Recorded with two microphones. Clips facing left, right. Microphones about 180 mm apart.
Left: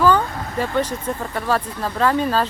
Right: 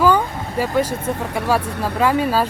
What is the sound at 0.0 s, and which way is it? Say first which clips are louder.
Vehicle: right 1 dB; 10° right (ahead or behind).